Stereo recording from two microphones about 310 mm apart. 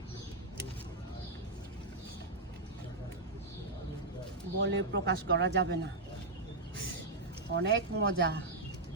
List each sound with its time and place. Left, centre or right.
4.6 s speech: right
7.5 s speech: right